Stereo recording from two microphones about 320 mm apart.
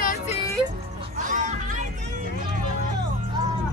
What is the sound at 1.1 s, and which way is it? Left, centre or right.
Music, right.